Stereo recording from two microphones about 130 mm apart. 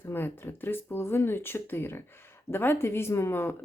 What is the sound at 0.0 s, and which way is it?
Speech, 15° left (ahead or behind).